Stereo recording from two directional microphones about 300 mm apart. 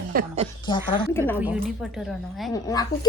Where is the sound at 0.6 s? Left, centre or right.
Centre.